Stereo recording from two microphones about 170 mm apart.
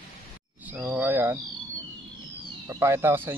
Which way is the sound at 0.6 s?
10° right (ahead or behind).